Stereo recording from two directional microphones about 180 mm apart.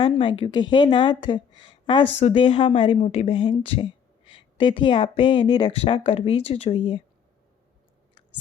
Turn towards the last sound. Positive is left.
turn(degrees=30)  # may be behind; listen again after turning